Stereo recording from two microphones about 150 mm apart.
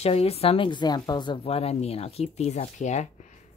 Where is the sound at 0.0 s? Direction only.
40° left (ahead or behind).